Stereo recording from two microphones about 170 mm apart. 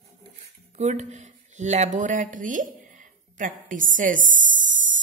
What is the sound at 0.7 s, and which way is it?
A woman's voice, 40° right (ahead or behind).